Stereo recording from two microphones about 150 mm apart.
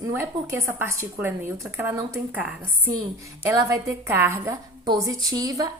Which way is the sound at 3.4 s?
20° right (ahead or behind).